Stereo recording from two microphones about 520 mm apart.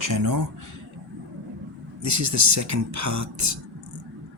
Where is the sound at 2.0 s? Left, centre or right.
Right.